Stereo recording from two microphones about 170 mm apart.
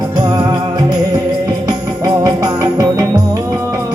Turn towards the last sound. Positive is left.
turn(degrees=-20)  # may be behind; listen again after turning